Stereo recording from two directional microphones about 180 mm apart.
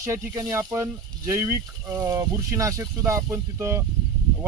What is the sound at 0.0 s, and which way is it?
Speech, 15° right (ahead or behind).